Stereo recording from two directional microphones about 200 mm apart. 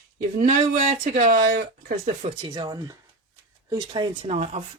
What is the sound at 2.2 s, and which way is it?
Speech, 25° right (ahead or behind).